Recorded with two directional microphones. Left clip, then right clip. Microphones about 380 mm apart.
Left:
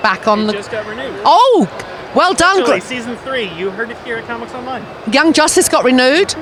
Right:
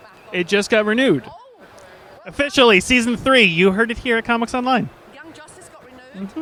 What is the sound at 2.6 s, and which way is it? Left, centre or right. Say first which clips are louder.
Speech: right 2 dB; right.